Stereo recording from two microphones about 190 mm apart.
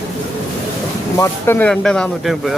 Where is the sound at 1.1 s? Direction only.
15° left (ahead or behind).